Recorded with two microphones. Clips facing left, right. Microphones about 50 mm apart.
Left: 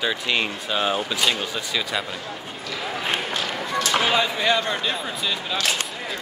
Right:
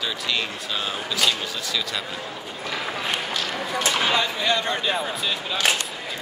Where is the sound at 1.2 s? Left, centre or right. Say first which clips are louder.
Left 1 dB; centre.